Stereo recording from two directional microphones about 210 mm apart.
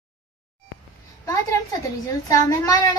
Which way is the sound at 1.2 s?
15° left (ahead or behind).